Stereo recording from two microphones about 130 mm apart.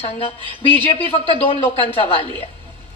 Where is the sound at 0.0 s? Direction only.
45° left (ahead or behind).